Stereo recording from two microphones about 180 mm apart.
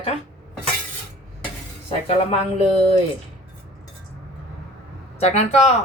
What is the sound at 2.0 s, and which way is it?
Speech, 35° left (ahead or behind).